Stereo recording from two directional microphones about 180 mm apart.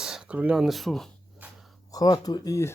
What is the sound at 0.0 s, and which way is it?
Speech, 5° right (ahead or behind).